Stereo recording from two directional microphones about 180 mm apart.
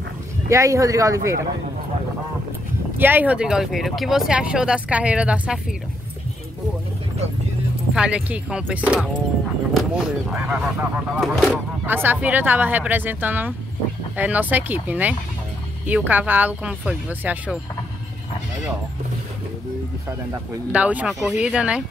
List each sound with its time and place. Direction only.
0.5 s speech: 20° right (ahead or behind)
3.0 s speech: 10° right (ahead or behind)
7.9 s speech: 5° right (ahead or behind)
11.8 s speech: 10° right (ahead or behind)
20.1 s speech: 10° right (ahead or behind)